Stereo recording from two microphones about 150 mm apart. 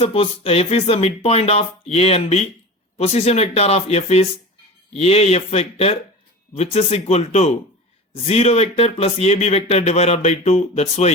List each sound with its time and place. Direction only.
0.0 s speech: 40° left (ahead or behind)